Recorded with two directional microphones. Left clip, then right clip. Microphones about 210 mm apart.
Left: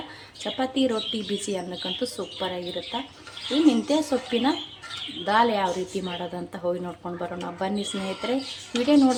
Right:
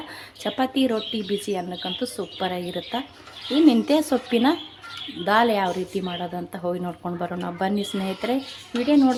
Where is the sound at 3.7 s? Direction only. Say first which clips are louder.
Right 2 dB; 20° right (ahead or behind).